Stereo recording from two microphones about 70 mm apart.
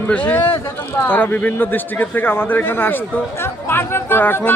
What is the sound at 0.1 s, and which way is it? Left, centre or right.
A man's voice, left.